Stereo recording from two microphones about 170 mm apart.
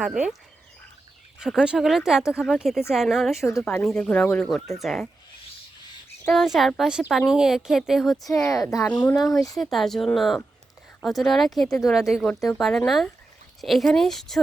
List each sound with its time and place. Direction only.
0.0 s speech: 5° right (ahead or behind)
1.4 s speech: 5° right (ahead or behind)
6.3 s speech: centre (ahead or behind)
8.3 s speech: 20° left (ahead or behind); by 14.4 s centre (ahead or behind)